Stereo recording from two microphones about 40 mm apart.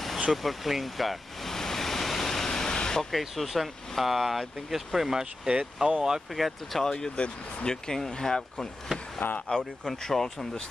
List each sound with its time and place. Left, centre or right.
0.3 s a sound: centre
3.1 s speech: centre
6.3 s speech: centre
6.8 s speech: centre